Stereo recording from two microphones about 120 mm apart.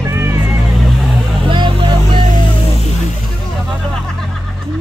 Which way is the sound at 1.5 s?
45° right (ahead or behind).